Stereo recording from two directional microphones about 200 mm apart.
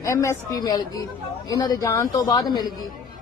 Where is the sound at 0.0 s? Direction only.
15° left (ahead or behind).